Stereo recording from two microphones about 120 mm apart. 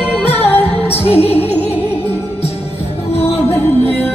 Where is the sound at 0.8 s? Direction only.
55° left (ahead or behind).